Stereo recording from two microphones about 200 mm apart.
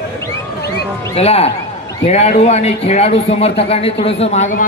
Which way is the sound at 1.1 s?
30° left (ahead or behind).